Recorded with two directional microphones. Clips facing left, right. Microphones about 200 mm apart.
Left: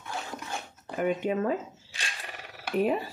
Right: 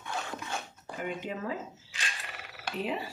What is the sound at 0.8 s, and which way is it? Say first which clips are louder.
Speech: left 10 dB; 60° left (ahead or behind).